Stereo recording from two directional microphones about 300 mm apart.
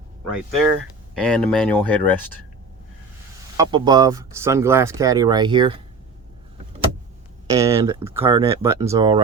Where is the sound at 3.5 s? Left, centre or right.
Centre.